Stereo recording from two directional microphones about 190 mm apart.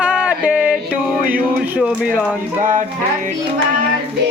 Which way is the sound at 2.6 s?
45° right (ahead or behind).